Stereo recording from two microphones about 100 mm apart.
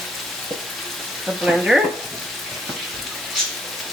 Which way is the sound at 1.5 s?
5° right (ahead or behind).